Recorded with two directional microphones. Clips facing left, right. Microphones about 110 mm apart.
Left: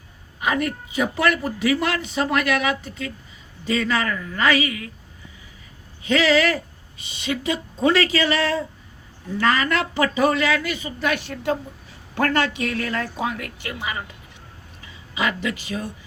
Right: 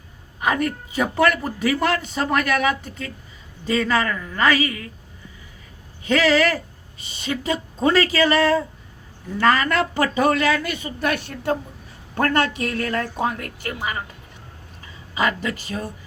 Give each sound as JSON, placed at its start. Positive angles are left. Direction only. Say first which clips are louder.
{"t": 0.3, "sound": "a man's voice", "louder": "right 1 dB", "side_deg": -40}
{"t": 3.7, "sound": "speech", "louder": "right 2 dB", "side_deg": -40}
{"t": 6.0, "sound": "a man's voice", "louder": "right 1 dB", "side_deg": -45}
{"t": 15.1, "sound": "a man's voice", "louder": "right 2 dB", "side_deg": -45}